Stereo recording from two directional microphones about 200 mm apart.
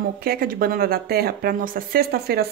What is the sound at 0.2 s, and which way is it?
Speech, 45° right (ahead or behind).